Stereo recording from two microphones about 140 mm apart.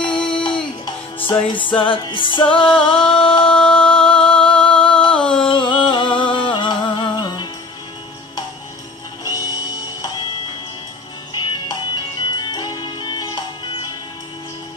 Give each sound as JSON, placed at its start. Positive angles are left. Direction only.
{"t": 0.0, "sound": "music", "side_deg": 35}
{"t": 1.8, "sound": "music", "side_deg": 35}
{"t": 3.5, "sound": "a sound", "side_deg": 10}
{"t": 3.9, "sound": "music", "side_deg": 35}
{"t": 4.6, "sound": "music", "side_deg": 10}
{"t": 5.1, "sound": "a sound", "side_deg": 5}
{"t": 5.5, "sound": "music", "side_deg": 35}
{"t": 9.2, "sound": "music", "side_deg": 30}
{"t": 11.3, "sound": "music", "side_deg": 30}